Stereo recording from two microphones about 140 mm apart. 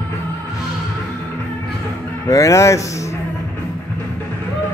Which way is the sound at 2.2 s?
20° left (ahead or behind).